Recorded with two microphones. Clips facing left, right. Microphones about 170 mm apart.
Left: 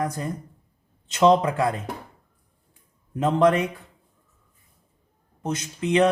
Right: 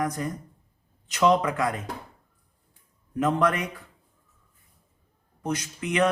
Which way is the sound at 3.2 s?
25° left (ahead or behind).